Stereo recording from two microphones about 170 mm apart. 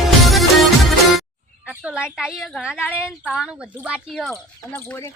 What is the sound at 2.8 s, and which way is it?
Speech, 15° left (ahead or behind).